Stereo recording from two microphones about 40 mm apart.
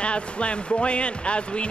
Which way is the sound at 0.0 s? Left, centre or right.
Left.